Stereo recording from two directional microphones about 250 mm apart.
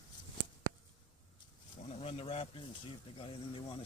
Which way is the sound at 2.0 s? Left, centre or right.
Left.